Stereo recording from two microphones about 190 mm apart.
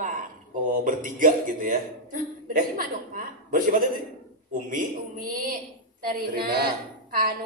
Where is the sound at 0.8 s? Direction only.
45° right (ahead or behind).